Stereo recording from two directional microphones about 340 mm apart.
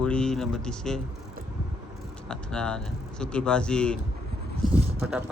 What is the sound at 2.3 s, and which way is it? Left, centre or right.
Speech, centre.